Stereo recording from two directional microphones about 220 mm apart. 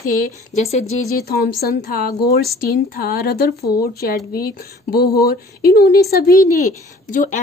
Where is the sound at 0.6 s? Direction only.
30° left (ahead or behind).